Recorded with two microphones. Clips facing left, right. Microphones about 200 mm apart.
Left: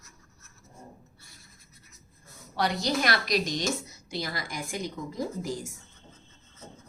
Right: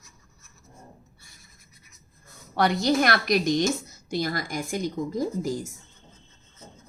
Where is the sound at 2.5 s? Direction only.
55° right (ahead or behind).